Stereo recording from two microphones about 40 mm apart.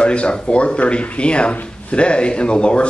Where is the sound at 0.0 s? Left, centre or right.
Left.